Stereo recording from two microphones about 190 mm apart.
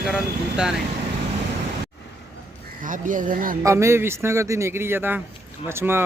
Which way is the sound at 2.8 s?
45° right (ahead or behind).